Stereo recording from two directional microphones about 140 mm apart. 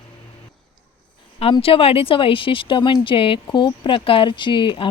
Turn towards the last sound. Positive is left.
turn(degrees=35)  # may be behind; listen again after turning